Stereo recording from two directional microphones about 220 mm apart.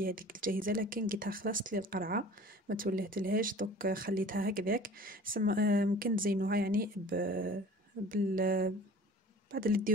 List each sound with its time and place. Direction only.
0.0 s speech: 40° right (ahead or behind)